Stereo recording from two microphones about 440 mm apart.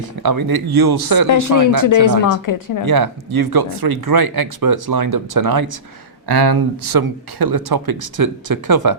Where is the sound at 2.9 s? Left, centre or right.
Right.